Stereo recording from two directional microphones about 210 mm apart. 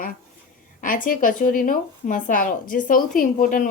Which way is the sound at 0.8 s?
40° left (ahead or behind).